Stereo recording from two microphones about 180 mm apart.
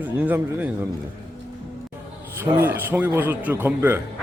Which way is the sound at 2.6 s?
10° right (ahead or behind).